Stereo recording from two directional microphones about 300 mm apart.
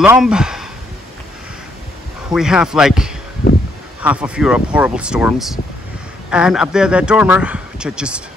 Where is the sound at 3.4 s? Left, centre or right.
Left.